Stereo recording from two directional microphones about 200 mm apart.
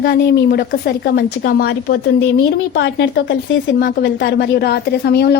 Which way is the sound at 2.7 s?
60° left (ahead or behind).